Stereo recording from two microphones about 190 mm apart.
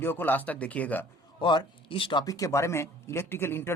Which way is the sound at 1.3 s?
25° left (ahead or behind).